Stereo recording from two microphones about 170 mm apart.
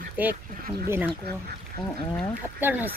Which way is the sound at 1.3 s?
70° right (ahead or behind).